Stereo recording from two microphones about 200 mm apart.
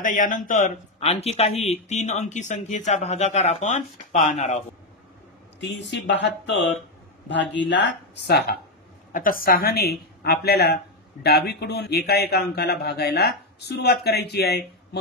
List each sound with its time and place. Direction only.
0.0 s speech: 40° left (ahead or behind)
5.6 s speech: 60° left (ahead or behind)
9.1 s speech: 45° left (ahead or behind)